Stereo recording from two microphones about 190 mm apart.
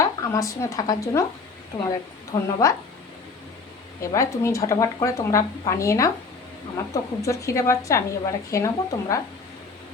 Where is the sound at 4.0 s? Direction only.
15° left (ahead or behind).